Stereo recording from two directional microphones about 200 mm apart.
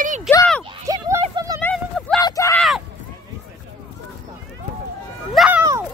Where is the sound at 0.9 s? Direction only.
15° right (ahead or behind).